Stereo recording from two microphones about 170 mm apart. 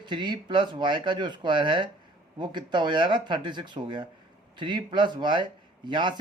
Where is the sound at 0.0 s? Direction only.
25° right (ahead or behind).